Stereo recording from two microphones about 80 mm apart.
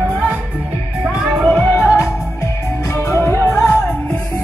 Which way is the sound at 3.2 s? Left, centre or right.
Left.